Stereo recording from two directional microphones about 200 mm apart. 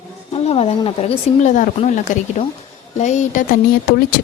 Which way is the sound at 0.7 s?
30° left (ahead or behind).